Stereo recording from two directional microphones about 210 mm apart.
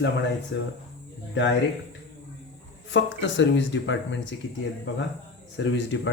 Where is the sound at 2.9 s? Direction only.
60° left (ahead or behind).